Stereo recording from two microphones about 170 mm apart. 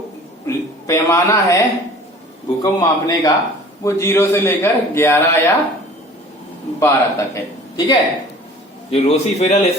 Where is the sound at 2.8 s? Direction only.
20° left (ahead or behind).